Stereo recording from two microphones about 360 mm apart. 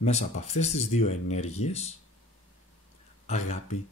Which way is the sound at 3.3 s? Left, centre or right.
Centre.